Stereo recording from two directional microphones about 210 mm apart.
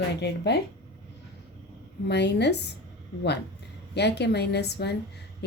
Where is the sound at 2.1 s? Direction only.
55° left (ahead or behind).